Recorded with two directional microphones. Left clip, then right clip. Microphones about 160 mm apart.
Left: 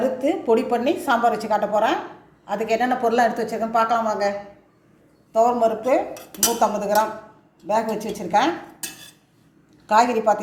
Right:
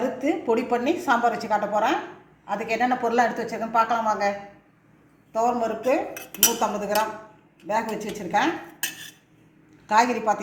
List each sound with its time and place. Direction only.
0.0 s a woman's voice: 10° left (ahead or behind)
6.6 s a woman's voice: 15° left (ahead or behind)
9.8 s a woman's voice: 10° left (ahead or behind)